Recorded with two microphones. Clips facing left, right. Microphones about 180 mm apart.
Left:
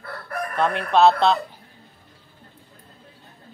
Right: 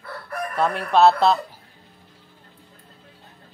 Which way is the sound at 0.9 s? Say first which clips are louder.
Right 1 dB; 5° right (ahead or behind).